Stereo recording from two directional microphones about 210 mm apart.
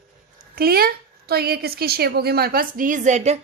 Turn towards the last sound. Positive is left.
turn(degrees=-35)  # may be behind; listen again after turning